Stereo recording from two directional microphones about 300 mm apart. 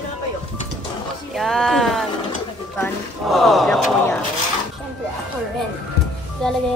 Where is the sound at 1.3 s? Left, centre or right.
Centre.